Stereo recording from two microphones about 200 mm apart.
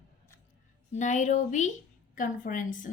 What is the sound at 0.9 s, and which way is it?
A woman's voice, 35° left (ahead or behind).